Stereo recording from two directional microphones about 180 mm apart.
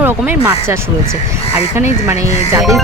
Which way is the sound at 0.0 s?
10° right (ahead or behind).